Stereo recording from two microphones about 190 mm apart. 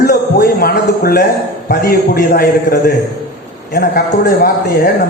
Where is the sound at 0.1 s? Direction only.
55° left (ahead or behind).